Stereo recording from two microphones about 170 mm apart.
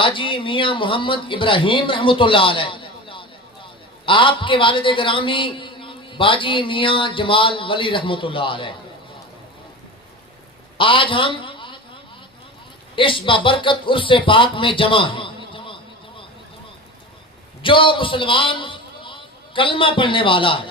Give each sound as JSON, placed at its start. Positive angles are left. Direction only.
{"t": 0.0, "sound": "speech", "side_deg": 30}
{"t": 10.8, "sound": "a man's voice", "side_deg": 30}
{"t": 13.0, "sound": "speech", "side_deg": 30}
{"t": 17.6, "sound": "a man's voice", "side_deg": 30}